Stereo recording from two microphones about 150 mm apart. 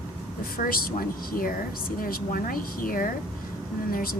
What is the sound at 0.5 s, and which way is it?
A woman's voice, 75° left (ahead or behind).